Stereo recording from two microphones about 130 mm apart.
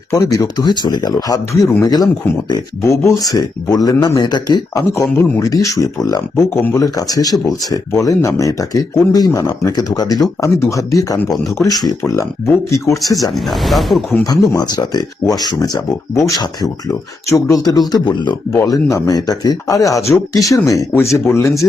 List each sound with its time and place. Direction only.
0.1 s speech: 25° left (ahead or behind)
13.3 s speech: centre (ahead or behind)
14.3 s speech: 30° left (ahead or behind)